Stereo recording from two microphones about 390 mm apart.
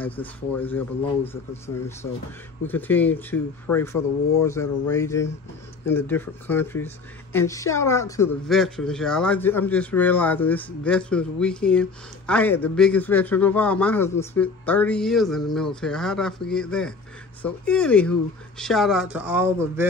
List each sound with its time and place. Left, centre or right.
0.0 s speech: centre
2.6 s speech: centre